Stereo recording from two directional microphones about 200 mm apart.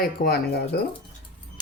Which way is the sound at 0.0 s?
50° left (ahead or behind).